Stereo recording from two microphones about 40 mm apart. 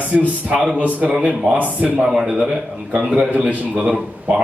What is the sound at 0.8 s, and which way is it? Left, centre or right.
Speech, right.